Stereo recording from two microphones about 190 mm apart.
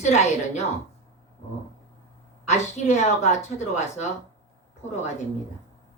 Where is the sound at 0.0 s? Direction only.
35° left (ahead or behind).